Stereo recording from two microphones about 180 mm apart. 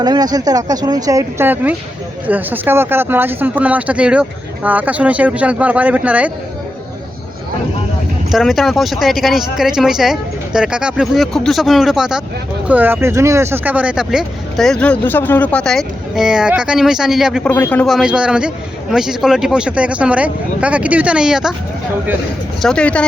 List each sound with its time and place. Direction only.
0.0 s speech: 20° right (ahead or behind)
8.3 s speech: centre (ahead or behind)
17.5 s speech: 10° left (ahead or behind)
22.6 s speech: 5° left (ahead or behind)